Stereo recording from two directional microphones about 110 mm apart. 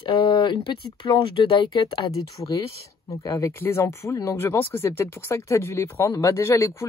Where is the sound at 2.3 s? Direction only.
30° left (ahead or behind).